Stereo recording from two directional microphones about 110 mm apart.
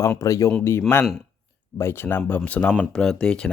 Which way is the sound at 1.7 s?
20° left (ahead or behind).